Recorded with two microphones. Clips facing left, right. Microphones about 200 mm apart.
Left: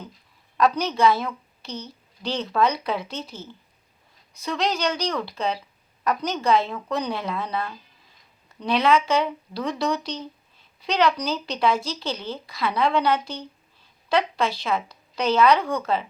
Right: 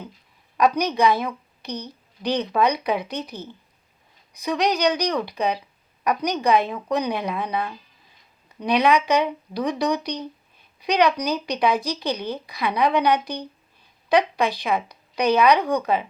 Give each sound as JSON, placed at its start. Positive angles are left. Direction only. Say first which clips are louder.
{"t": 0.5, "sound": "a woman's voice", "louder": "right 2 dB", "side_deg": -15}